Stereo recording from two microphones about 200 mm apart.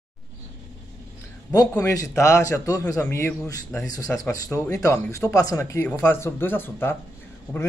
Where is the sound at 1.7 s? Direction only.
15° left (ahead or behind).